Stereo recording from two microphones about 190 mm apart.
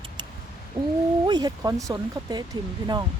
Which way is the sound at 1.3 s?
20° right (ahead or behind).